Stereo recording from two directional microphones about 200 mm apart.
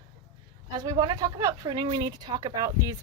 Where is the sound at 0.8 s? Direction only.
20° right (ahead or behind).